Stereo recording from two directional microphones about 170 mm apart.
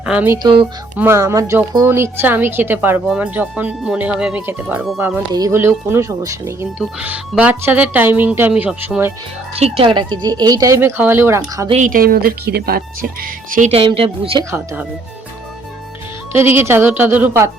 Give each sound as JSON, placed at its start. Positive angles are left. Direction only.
{"t": 0.0, "sound": "speech", "side_deg": -10}
{"t": 0.4, "sound": "speech", "side_deg": -30}
{"t": 0.9, "sound": "a woman's voice", "side_deg": -15}
{"t": 9.6, "sound": "speech", "side_deg": -35}
{"t": 11.7, "sound": "speech", "side_deg": -50}
{"t": 13.5, "sound": "speech", "side_deg": -45}
{"t": 13.7, "sound": "speech", "side_deg": -35}
{"t": 16.3, "sound": "a woman's voice", "side_deg": -15}